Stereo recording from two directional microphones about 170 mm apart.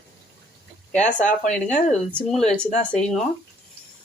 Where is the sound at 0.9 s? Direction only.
45° left (ahead or behind).